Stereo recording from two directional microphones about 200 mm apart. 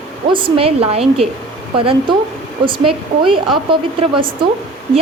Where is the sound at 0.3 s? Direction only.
25° right (ahead or behind).